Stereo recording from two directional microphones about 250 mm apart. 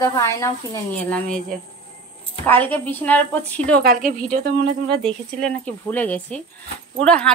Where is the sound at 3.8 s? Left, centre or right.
Right.